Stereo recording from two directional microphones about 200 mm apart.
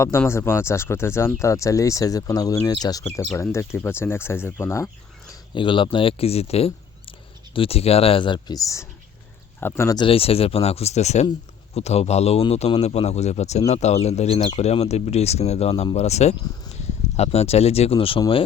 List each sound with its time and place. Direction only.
0.0 s speech: 15° left (ahead or behind)
5.3 s speech: 25° left (ahead or behind)